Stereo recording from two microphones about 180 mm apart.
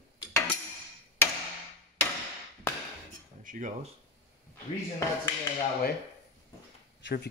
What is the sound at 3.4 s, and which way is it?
Speech, 45° right (ahead or behind).